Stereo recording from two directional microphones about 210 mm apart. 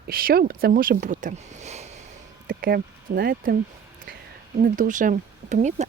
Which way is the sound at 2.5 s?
40° right (ahead or behind).